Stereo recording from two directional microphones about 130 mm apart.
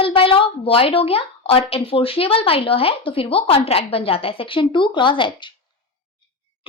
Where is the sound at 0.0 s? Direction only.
45° left (ahead or behind).